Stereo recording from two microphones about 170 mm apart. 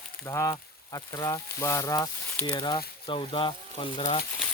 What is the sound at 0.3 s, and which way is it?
Speech, 20° left (ahead or behind).